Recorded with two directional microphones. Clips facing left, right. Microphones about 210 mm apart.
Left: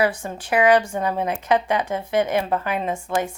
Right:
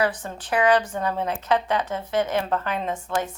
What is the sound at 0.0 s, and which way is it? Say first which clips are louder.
A woman's voice: left 3 dB; 10° left (ahead or behind).